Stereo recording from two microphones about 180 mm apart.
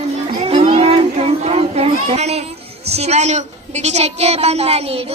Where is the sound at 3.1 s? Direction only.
40° right (ahead or behind).